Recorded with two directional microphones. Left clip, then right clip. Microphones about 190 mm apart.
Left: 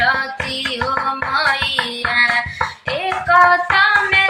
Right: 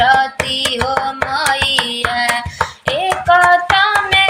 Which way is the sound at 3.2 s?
30° right (ahead or behind).